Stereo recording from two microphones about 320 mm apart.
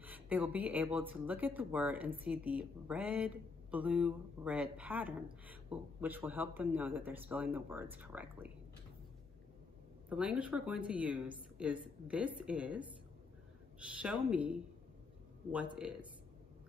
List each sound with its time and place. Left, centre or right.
0.0 s speech: centre
10.0 s speech: centre